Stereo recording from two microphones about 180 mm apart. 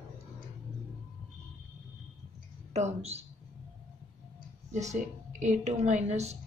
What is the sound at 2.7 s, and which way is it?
Speech, 35° right (ahead or behind).